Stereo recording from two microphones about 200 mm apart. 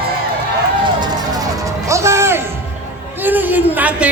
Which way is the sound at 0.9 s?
20° right (ahead or behind).